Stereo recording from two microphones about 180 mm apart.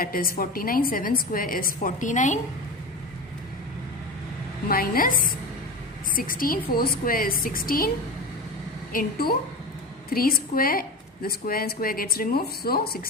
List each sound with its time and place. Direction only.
0.0 s a woman's voice: 55° left (ahead or behind)
4.7 s a woman's voice: 55° left (ahead or behind)
8.9 s a woman's voice: 50° left (ahead or behind)